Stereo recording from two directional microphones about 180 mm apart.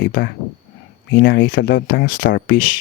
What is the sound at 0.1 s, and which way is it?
Speech, 60° left (ahead or behind).